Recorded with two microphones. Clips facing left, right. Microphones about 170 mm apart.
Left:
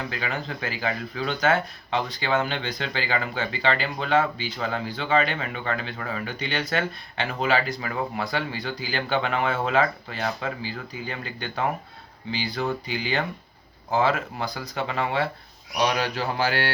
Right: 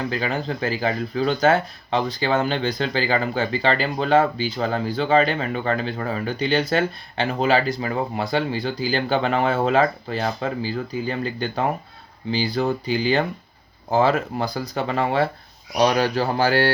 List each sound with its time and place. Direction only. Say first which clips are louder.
0.0 s speech: right 6 dB; 35° right (ahead or behind)